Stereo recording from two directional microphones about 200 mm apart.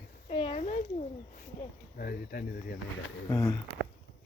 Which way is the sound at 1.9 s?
50° left (ahead or behind).